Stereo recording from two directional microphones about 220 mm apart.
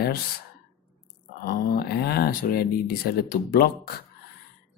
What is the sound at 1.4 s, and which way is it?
Speech, 45° left (ahead or behind).